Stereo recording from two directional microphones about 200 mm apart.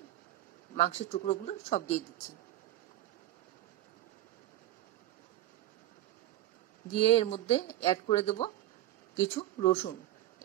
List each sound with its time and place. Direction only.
0.7 s speech: 35° left (ahead or behind)
7.0 s speech: 30° left (ahead or behind)